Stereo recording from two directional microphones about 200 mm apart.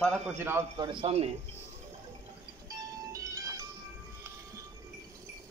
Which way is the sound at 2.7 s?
15° right (ahead or behind).